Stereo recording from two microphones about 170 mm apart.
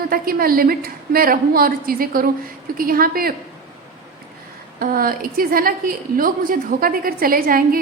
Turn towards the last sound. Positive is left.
turn(degrees=-55)  # may be behind; listen again after turning